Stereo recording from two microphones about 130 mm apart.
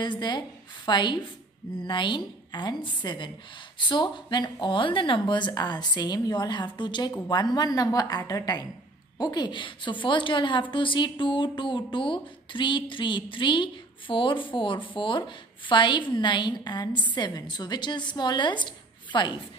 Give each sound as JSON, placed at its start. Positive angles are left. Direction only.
{"t": 0.0, "sound": "speech", "side_deg": 35}